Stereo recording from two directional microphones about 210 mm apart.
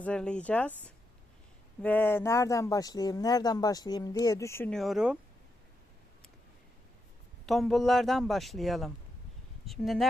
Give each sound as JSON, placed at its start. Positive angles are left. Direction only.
{"t": 0.0, "sound": "speech", "side_deg": 5}
{"t": 1.8, "sound": "speech", "side_deg": 10}
{"t": 7.4, "sound": "a man's voice", "side_deg": 0}